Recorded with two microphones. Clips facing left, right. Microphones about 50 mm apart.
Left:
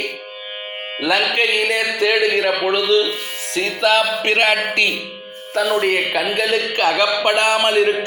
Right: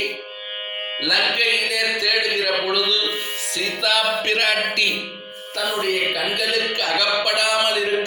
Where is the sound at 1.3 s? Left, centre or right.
Left.